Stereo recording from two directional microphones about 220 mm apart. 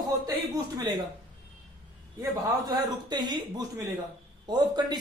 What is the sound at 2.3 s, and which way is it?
A man's voice, 20° right (ahead or behind).